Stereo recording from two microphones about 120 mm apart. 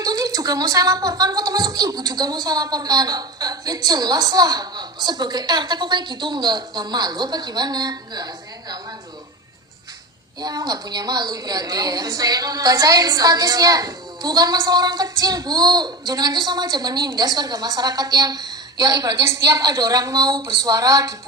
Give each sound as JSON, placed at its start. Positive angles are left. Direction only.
{"t": 0.0, "sound": "a woman's voice", "side_deg": -30}
{"t": 10.4, "sound": "a woman's voice", "side_deg": -30}